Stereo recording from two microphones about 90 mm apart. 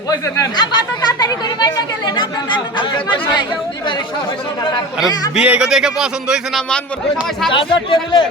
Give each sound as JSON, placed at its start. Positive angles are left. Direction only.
{"t": 0.5, "sound": "speech", "side_deg": 50}
{"t": 5.3, "sound": "speech", "side_deg": -10}
{"t": 7.5, "sound": "speech", "side_deg": 65}